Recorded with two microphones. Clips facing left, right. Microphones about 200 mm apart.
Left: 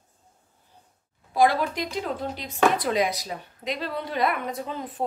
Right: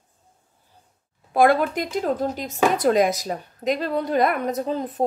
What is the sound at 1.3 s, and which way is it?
Speech, 55° right (ahead or behind).